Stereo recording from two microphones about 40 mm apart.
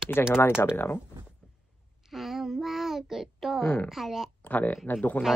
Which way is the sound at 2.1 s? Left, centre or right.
Centre.